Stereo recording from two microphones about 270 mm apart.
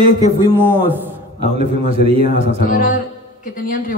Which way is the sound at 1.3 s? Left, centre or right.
Right.